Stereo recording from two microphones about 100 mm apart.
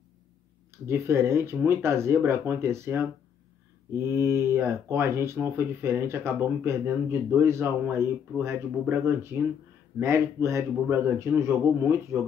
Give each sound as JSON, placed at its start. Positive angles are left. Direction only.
{"t": 0.8, "sound": "speech", "side_deg": -25}